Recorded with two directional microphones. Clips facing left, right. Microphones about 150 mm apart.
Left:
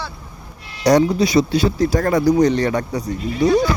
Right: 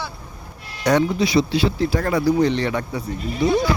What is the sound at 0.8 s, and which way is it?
Speech, 35° left (ahead or behind).